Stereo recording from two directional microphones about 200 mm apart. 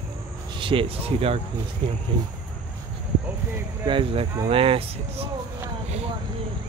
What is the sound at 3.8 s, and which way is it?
Speech, 25° right (ahead or behind).